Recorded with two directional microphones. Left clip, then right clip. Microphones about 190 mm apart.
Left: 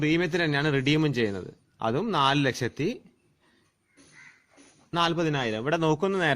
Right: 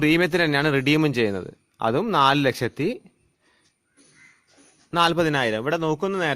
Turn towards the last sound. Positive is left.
turn(degrees=-15)  # may be behind; listen again after turning